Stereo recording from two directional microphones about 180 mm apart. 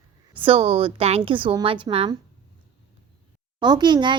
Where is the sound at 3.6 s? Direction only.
25° right (ahead or behind).